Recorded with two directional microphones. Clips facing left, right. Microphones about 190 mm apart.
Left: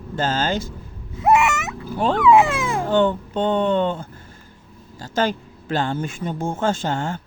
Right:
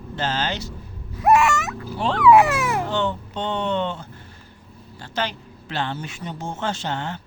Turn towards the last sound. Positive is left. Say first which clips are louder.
# left 5 dB
turn(degrees=45)  # may be behind; listen again after turning